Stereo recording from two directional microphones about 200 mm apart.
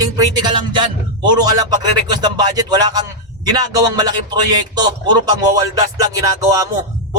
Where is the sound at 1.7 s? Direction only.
20° right (ahead or behind).